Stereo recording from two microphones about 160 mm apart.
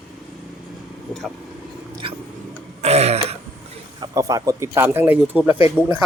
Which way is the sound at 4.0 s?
20° right (ahead or behind).